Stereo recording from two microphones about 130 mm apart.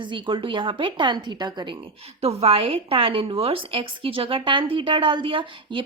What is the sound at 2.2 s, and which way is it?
A woman's voice, 55° right (ahead or behind).